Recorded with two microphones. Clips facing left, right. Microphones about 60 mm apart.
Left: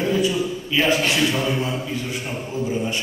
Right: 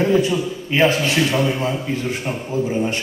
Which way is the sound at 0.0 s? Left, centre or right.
Right.